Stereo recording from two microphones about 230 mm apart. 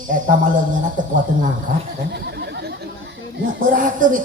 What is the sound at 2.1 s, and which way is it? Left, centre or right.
Speech, right.